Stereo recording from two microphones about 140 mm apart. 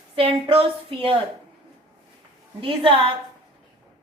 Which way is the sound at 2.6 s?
40° right (ahead or behind).